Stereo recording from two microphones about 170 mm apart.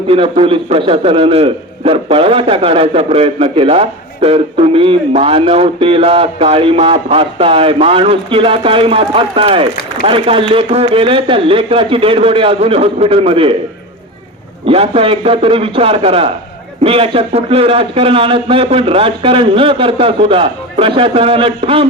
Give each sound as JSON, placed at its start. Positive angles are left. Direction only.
{"t": 0.1, "sound": "a man's voice", "side_deg": -35}
{"t": 14.7, "sound": "a man's voice", "side_deg": -35}